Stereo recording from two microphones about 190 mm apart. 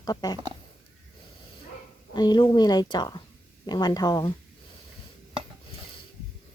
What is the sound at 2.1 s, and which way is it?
A woman's voice, 20° left (ahead or behind).